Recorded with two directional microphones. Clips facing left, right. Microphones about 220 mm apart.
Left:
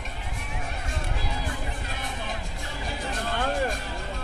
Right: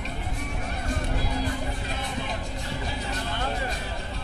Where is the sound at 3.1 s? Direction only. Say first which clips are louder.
Left 5 dB; 50° left (ahead or behind).